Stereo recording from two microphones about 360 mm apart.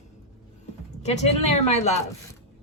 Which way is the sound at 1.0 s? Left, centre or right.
Centre.